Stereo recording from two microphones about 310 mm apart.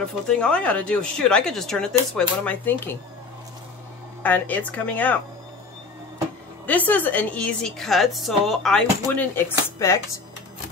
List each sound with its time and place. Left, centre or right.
0.3 s a woman's voice: centre
4.2 s a woman's voice: centre
6.6 s a woman's voice: centre